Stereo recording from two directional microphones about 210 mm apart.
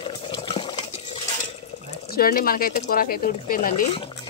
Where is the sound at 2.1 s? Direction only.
45° left (ahead or behind).